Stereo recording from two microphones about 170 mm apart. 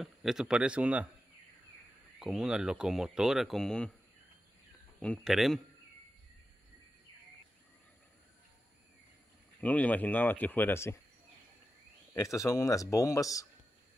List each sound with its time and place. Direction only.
0.0 s speech: centre (ahead or behind)
2.1 s speech: centre (ahead or behind)
5.0 s speech: centre (ahead or behind)
9.6 s speech: 10° left (ahead or behind)
12.1 s a man's voice: 20° left (ahead or behind)